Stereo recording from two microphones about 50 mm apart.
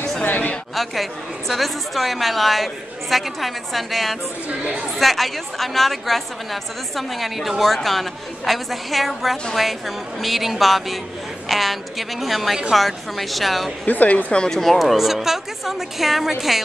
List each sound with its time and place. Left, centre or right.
0.2 s a sound: left
1.5 s a woman's voice: centre
13.8 s speech: left
14.3 s speech: centre
14.6 s a woman's voice: centre